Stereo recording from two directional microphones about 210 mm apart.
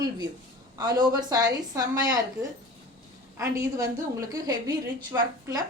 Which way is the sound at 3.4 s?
15° right (ahead or behind).